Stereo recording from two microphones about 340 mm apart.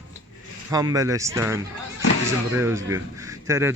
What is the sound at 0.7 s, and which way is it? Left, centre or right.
Speech, centre.